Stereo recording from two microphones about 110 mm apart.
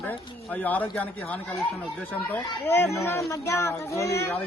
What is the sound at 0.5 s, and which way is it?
Speech, 15° left (ahead or behind).